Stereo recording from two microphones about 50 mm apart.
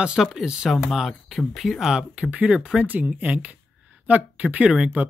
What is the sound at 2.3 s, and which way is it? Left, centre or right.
Speech, right.